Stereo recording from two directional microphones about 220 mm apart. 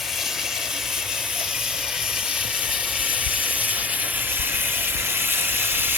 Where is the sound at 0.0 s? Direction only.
Centre (ahead or behind).